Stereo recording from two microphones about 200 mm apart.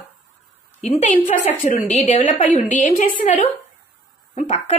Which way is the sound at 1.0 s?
40° left (ahead or behind).